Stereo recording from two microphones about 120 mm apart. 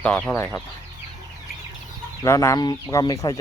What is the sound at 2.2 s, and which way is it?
Speech, 25° left (ahead or behind).